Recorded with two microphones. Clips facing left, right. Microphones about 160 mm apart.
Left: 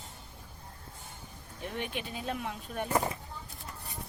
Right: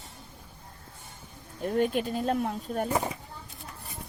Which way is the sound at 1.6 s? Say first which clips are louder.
Right 11 dB; 40° right (ahead or behind).